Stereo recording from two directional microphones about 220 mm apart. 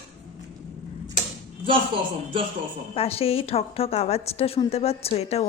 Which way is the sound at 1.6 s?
25° right (ahead or behind).